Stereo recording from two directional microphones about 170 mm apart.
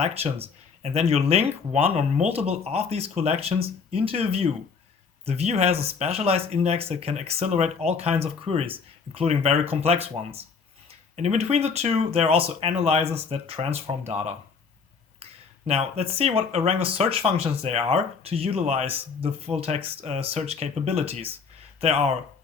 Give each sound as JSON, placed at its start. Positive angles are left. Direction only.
{"t": 0.0, "sound": "speech", "side_deg": -35}